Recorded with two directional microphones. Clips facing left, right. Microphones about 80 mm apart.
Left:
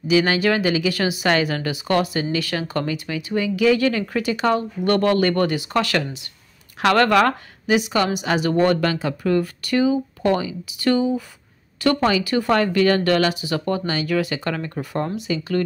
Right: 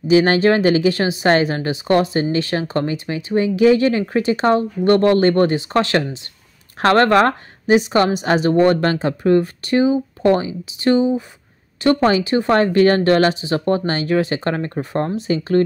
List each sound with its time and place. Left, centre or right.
0.1 s a woman's voice: right